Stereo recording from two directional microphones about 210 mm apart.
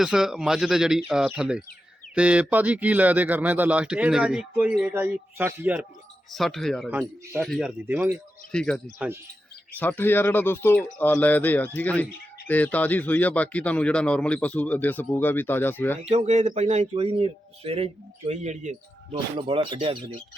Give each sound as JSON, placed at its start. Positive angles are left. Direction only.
{"t": 0.0, "sound": "speech", "side_deg": 0}
{"t": 8.5, "sound": "speech", "side_deg": 5}
{"t": 9.0, "sound": "speech", "side_deg": -10}
{"t": 9.7, "sound": "speech", "side_deg": 10}
{"t": 16.0, "sound": "speech", "side_deg": -30}